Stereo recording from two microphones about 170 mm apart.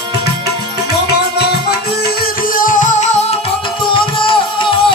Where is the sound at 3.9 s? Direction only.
30° left (ahead or behind).